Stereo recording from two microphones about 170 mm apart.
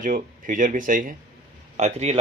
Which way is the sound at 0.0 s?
50° right (ahead or behind).